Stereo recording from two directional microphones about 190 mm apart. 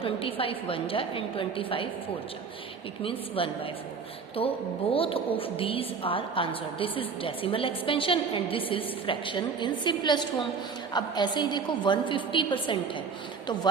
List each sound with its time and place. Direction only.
0.0 s a woman's voice: 30° left (ahead or behind)
3.0 s a woman's voice: 30° left (ahead or behind)